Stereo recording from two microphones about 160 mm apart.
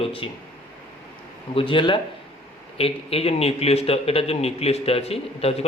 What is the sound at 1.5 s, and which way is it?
A man's voice, 30° left (ahead or behind).